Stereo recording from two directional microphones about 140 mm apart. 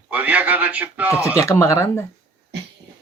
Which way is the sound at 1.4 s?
20° left (ahead or behind).